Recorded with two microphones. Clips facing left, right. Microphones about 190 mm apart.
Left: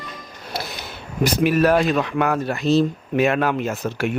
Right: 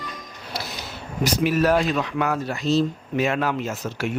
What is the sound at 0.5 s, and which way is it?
Speech, 60° left (ahead or behind).